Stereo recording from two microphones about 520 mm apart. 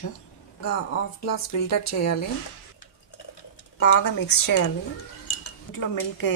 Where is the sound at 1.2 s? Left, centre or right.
Left.